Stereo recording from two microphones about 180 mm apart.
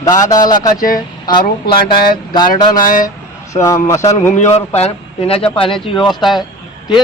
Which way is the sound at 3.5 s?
15° left (ahead or behind).